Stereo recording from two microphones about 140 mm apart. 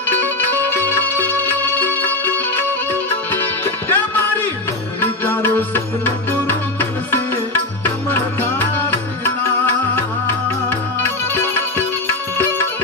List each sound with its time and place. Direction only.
0.8 s music: 15° left (ahead or behind)
11.0 s music: 15° left (ahead or behind)